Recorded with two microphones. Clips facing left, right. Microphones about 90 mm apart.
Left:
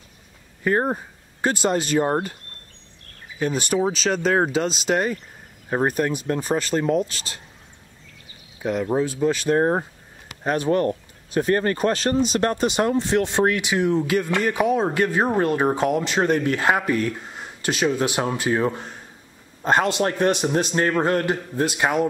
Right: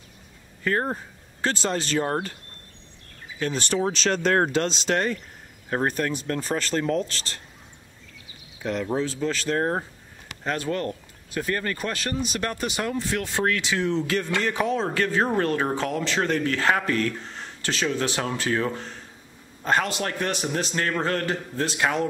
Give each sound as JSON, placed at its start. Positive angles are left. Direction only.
{"t": 0.7, "sound": "speech", "side_deg": 20}
{"t": 3.3, "sound": "speech", "side_deg": 10}
{"t": 8.6, "sound": "speech", "side_deg": 10}